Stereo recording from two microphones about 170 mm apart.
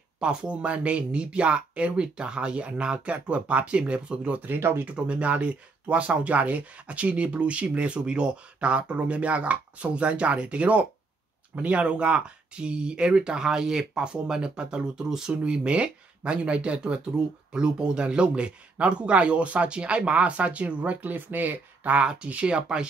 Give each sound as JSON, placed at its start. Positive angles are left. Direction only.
{"t": 0.2, "sound": "speech", "side_deg": -5}